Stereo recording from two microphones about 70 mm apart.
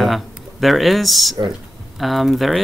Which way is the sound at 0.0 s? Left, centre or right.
Centre.